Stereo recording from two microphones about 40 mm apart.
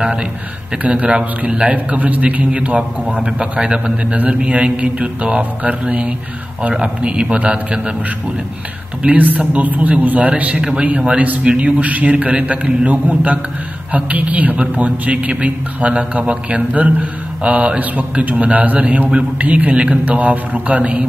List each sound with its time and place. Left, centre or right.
0.8 s speech: right
3.2 s a man's voice: right
7.2 s speech: right
7.5 s a man's voice: right
9.0 s speech: right